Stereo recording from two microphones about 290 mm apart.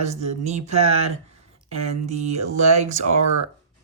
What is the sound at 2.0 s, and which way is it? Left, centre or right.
Speech, right.